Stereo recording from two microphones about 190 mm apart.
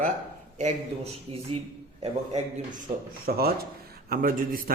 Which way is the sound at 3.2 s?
55° right (ahead or behind).